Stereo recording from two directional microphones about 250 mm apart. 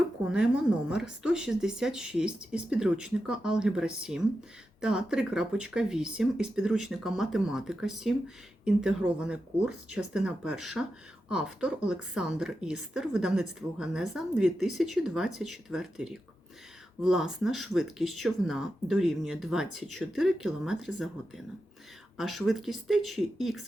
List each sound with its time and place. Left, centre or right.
0.3 s a woman's voice: centre